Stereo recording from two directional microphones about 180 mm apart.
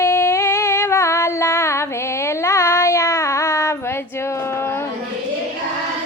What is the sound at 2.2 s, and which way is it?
Child singing, 15° left (ahead or behind).